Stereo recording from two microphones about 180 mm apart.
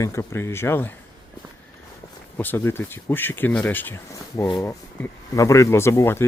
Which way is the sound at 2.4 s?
10° left (ahead or behind).